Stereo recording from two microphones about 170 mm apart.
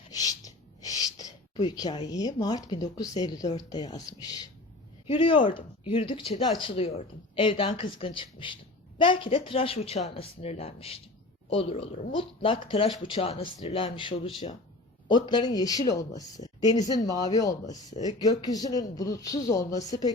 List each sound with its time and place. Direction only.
0.1 s speech: 20° left (ahead or behind)